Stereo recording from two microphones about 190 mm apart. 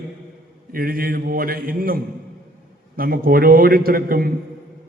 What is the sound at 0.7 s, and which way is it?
A man's voice, 50° right (ahead or behind).